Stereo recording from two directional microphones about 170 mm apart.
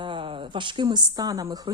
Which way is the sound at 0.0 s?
30° right (ahead or behind).